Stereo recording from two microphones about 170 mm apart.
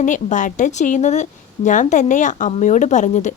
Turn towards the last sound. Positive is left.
turn(degrees=45)  # may be behind; listen again after turning